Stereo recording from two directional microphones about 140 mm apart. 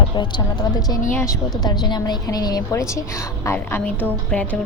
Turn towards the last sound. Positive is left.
turn(degrees=10)  # may be behind; listen again after turning